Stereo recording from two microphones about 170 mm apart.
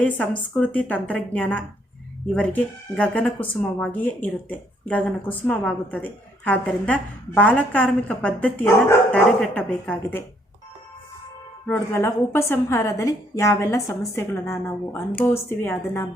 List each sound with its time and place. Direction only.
0.0 s speech: 5° left (ahead or behind)
11.7 s speech: 15° left (ahead or behind)